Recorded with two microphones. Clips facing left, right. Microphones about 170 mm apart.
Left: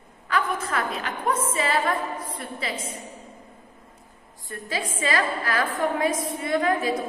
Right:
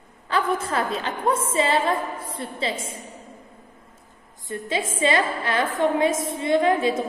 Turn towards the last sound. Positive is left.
turn(degrees=-25)  # may be behind; listen again after turning